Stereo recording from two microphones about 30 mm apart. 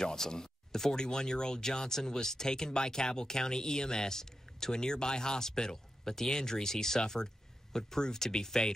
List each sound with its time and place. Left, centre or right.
0.0 s speech: left
4.7 s speech: left